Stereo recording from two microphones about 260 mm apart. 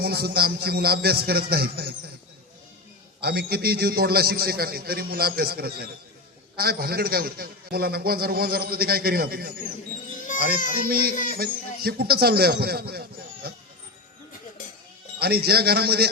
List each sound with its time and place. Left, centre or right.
0.0 s a man's voice: right
3.2 s a man's voice: right
10.3 s baby cry: left
10.8 s a man's voice: right
15.2 s a man's voice: right